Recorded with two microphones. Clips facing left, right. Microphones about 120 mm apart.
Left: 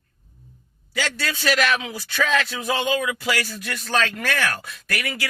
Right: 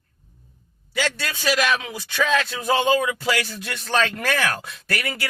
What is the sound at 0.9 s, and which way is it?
A man's voice, 15° right (ahead or behind).